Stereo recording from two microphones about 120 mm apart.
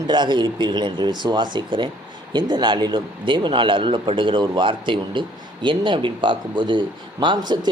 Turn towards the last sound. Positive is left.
turn(degrees=-35)  # may be behind; listen again after turning